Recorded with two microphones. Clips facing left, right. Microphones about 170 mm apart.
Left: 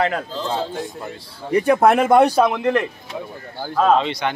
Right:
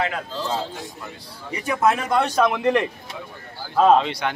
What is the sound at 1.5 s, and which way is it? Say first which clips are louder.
Speech: left 6 dB; 55° left (ahead or behind).